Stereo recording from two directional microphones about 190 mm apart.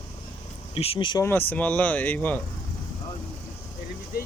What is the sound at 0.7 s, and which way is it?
Speech, 30° left (ahead or behind).